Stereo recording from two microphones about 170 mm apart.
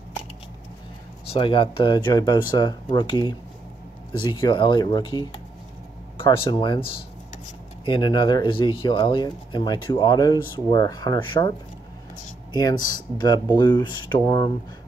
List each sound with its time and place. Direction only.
1.3 s speech: 30° left (ahead or behind)
12.5 s speech: 25° left (ahead or behind)